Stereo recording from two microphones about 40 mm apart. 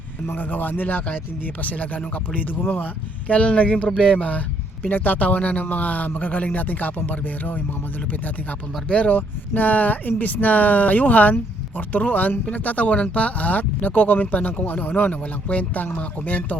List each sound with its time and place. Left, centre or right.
0.3 s speech: left
1.6 s speech: left
3.2 s speech: left
8.9 s speech: left
9.1 s speech: left